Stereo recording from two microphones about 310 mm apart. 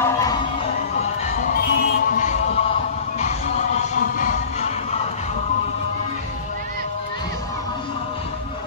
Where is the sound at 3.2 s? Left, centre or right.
Left.